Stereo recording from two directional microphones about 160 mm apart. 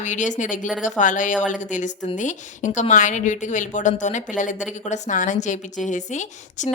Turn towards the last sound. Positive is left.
turn(degrees=50)  # may be behind; listen again after turning